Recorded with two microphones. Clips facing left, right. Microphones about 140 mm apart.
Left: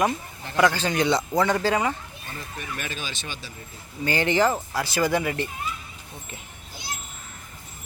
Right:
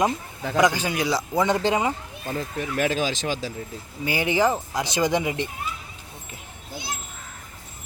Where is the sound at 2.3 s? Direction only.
90° right.